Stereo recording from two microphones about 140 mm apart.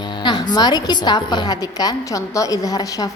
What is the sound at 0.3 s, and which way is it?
A woman's voice, 30° left (ahead or behind).